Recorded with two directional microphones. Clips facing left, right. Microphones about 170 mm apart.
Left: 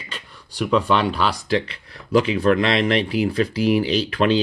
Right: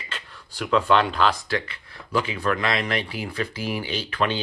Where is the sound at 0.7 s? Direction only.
10° left (ahead or behind).